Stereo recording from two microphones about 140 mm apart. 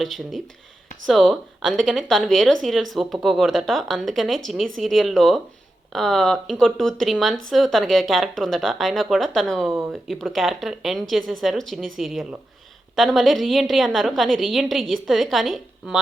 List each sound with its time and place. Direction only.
0.0 s speech: centre (ahead or behind)